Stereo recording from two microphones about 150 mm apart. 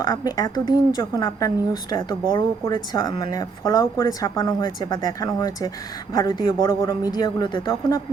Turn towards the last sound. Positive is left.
turn(degrees=30)  # may be behind; listen again after turning